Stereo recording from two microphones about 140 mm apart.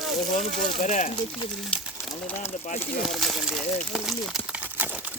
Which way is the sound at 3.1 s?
Centre (ahead or behind).